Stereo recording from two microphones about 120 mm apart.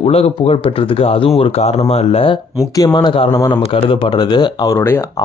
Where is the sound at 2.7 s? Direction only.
35° left (ahead or behind).